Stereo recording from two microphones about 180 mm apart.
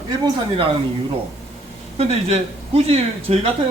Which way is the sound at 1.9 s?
35° right (ahead or behind).